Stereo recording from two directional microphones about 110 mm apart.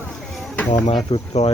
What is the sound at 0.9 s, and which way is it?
Speech, 75° left (ahead or behind).